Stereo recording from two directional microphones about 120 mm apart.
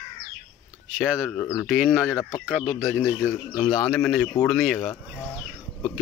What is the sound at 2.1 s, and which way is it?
Speech, 30° left (ahead or behind).